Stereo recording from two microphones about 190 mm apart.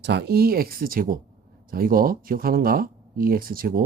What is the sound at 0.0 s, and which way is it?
Speech, 60° right (ahead or behind).